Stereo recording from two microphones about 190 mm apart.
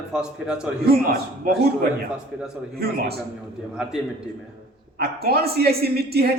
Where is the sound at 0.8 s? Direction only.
55° right (ahead or behind).